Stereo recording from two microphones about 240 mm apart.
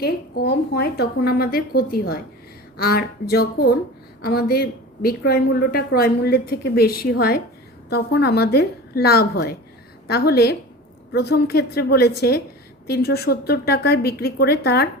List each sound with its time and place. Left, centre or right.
0.0 s a woman's voice: left